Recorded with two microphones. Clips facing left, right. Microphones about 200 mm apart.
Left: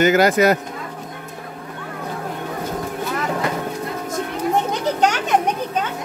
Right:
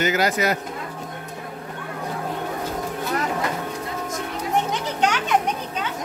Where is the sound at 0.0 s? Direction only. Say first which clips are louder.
Left 7 dB; 50° left (ahead or behind).